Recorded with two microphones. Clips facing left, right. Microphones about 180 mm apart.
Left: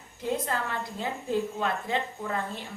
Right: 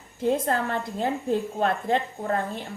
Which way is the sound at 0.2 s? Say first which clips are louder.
Right 6 dB; 50° right (ahead or behind).